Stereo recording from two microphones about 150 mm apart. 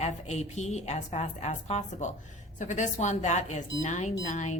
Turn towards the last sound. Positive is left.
turn(degrees=50)  # may be behind; listen again after turning